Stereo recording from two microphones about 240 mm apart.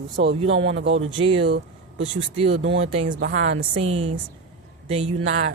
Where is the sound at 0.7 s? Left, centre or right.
Right.